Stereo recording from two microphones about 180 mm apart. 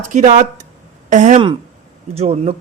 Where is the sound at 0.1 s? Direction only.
40° right (ahead or behind).